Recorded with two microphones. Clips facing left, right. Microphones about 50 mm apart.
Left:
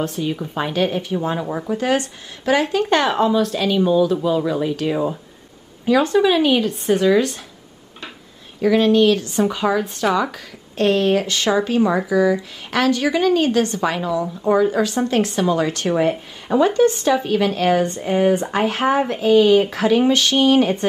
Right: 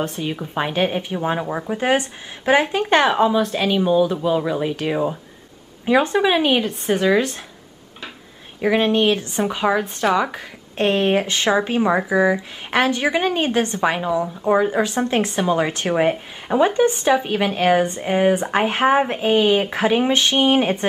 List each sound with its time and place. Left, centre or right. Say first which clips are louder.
0.0 s a woman's voice: left 2 dB; centre
5.9 s a woman's voice: left 1 dB; right
8.5 s a woman's voice: left 3 dB; right